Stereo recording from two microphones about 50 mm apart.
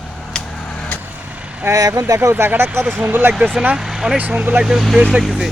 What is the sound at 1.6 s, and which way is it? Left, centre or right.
Speech, right.